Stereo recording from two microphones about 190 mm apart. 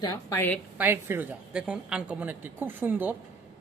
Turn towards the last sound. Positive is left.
turn(degrees=-10)  # may be behind; listen again after turning